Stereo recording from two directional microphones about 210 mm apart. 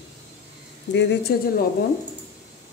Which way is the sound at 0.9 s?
55° left (ahead or behind).